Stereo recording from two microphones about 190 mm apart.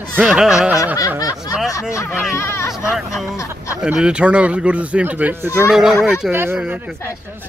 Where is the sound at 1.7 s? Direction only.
15° left (ahead or behind).